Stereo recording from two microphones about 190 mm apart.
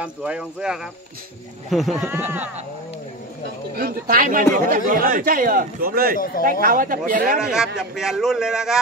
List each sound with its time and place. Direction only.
0.0 s a man's voice: 5° right (ahead or behind)
3.7 s speech: 50° right (ahead or behind)
6.1 s speech: 50° left (ahead or behind)
6.6 s speech: 45° right (ahead or behind)
7.3 s a man's voice: 5° right (ahead or behind)